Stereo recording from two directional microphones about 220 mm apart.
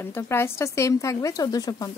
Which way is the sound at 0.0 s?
10° left (ahead or behind).